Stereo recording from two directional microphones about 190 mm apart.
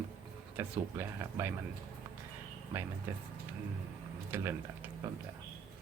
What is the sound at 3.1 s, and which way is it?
Speech, 10° right (ahead or behind).